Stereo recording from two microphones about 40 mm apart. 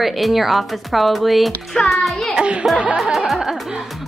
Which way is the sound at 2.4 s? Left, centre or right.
Right.